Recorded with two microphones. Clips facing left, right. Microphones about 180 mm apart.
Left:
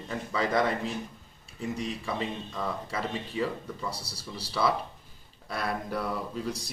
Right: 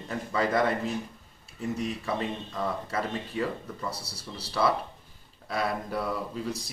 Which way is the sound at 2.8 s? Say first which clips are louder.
Right 2 dB; 5° left (ahead or behind).